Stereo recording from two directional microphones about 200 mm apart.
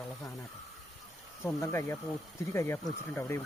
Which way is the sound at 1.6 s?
15° left (ahead or behind).